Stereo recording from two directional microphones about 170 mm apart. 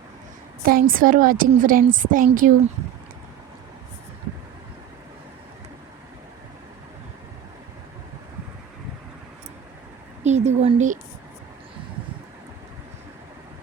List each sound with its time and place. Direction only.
0.6 s a woman's voice: 60° right (ahead or behind)
10.2 s a woman's voice: 40° right (ahead or behind)